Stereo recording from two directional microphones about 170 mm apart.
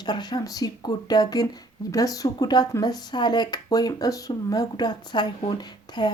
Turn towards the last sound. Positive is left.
turn(degrees=25)  # may be behind; listen again after turning